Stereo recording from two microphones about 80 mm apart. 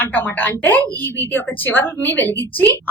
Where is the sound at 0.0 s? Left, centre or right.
Left.